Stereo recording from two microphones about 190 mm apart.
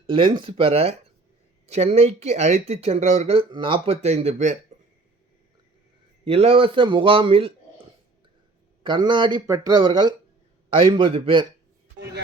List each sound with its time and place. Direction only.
0.1 s speech: 25° right (ahead or behind)
6.2 s speech: 30° right (ahead or behind)